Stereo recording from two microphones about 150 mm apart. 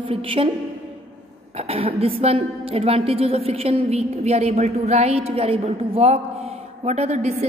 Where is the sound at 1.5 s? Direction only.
40° right (ahead or behind).